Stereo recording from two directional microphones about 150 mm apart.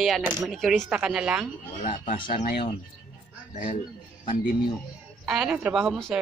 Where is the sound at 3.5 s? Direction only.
60° left (ahead or behind).